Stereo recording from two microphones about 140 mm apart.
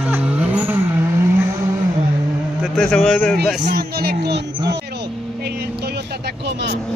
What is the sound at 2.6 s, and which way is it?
Speech, 5° left (ahead or behind).